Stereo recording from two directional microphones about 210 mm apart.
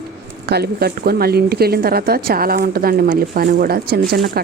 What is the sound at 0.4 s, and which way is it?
Speech, 50° right (ahead or behind).